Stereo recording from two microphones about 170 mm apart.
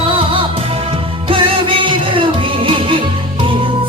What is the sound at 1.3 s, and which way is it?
Music, 30° right (ahead or behind).